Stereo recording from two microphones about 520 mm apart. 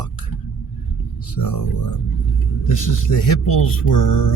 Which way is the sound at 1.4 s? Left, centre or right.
Left.